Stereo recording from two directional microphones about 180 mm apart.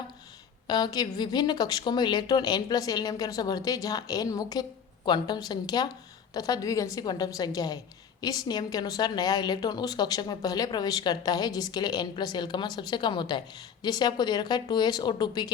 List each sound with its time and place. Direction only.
0.7 s a woman's voice: 20° left (ahead or behind)